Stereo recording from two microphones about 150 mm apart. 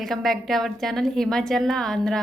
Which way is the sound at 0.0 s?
Centre (ahead or behind).